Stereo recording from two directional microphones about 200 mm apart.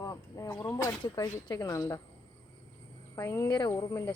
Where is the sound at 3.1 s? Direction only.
15° left (ahead or behind).